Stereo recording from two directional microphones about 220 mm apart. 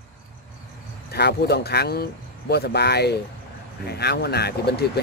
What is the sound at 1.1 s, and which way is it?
Speech, 45° left (ahead or behind).